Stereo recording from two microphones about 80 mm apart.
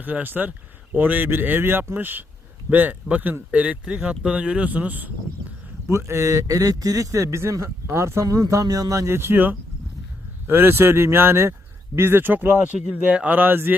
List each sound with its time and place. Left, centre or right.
0.0 s speech: right
5.9 s a man's voice: right